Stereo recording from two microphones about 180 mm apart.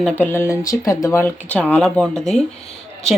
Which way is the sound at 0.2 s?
15° left (ahead or behind).